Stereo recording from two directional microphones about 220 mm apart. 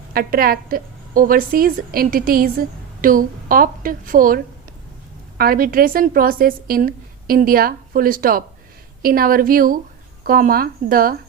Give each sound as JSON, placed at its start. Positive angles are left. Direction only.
{"t": 0.1, "sound": "a woman's voice", "side_deg": -40}
{"t": 5.4, "sound": "a woman's voice", "side_deg": -40}